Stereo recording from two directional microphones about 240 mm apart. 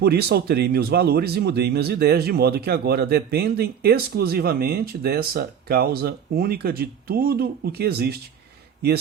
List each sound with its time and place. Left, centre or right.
0.0 s speech: right